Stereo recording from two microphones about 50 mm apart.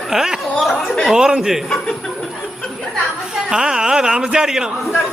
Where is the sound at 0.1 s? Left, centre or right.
Centre.